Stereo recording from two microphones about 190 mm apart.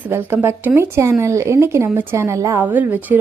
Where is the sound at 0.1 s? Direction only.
10° right (ahead or behind).